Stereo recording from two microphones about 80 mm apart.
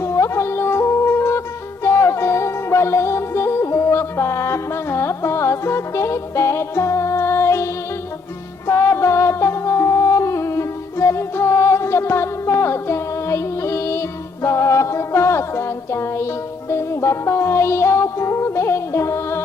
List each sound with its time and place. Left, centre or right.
0.0 s music: left